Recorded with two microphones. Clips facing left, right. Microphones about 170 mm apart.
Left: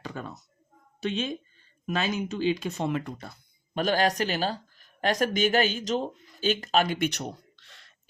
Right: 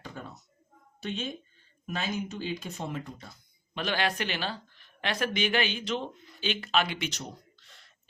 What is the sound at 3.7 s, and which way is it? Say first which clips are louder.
Speech: left 6 dB; 45° left (ahead or behind).